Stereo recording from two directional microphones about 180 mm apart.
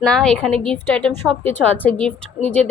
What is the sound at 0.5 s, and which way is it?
Speech, 30° right (ahead or behind).